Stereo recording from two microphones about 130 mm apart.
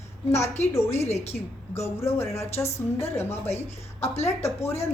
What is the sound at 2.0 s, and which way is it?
Speech, 20° left (ahead or behind).